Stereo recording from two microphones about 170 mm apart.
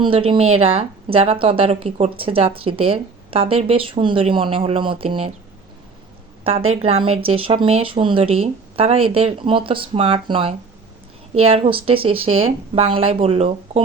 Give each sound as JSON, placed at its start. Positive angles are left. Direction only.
{"t": 0.0, "sound": "a woman's voice", "side_deg": -30}
{"t": 6.4, "sound": "a woman's voice", "side_deg": -35}